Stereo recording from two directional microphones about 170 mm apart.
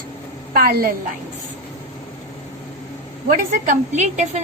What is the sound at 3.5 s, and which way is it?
Speech, 50° right (ahead or behind).